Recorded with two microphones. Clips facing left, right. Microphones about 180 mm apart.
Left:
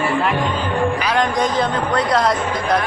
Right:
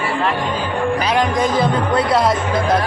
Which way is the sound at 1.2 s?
5° right (ahead or behind).